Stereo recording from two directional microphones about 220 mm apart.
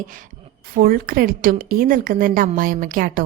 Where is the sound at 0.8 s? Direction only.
40° right (ahead or behind).